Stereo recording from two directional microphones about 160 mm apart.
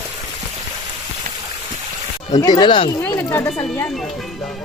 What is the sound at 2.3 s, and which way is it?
Speech, 25° left (ahead or behind).